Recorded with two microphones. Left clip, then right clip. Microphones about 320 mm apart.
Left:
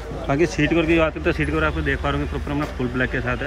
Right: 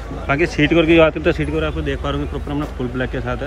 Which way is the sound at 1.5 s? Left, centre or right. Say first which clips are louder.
Even; centre.